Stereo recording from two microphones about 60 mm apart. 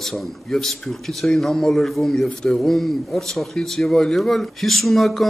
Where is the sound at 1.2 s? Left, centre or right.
Centre.